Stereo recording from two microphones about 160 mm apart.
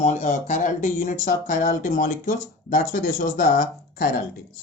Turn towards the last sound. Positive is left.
turn(degrees=60)  # may be behind; listen again after turning